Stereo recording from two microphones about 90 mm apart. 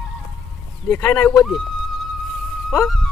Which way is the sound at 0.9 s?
25° left (ahead or behind).